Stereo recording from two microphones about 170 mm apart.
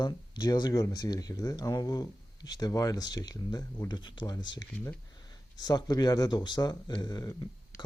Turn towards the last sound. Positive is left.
turn(degrees=20)  # may be behind; listen again after turning